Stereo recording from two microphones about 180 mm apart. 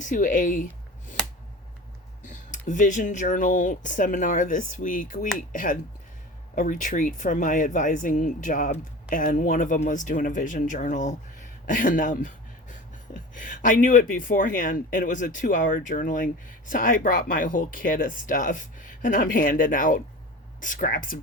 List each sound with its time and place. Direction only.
0.0 s speech: 45° left (ahead or behind)
2.2 s speech: 45° left (ahead or behind)